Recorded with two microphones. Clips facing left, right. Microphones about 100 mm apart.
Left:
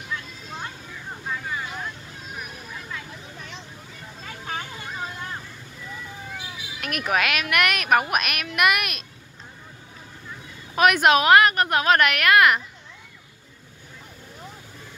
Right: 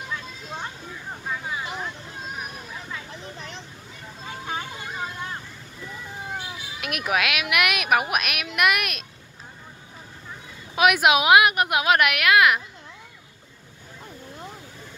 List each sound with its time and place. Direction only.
1.2 s vehicle: 10° right (ahead or behind)
4.2 s vehicle: 15° right (ahead or behind)
6.8 s speech: 5° right (ahead or behind)
10.7 s a woman's voice: 5° right (ahead or behind)